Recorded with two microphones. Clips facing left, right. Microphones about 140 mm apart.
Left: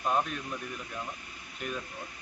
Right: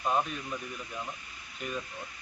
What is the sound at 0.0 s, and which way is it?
Speech, centre (ahead or behind).